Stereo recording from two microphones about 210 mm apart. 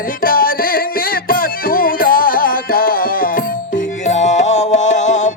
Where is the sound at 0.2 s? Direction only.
45° left (ahead or behind).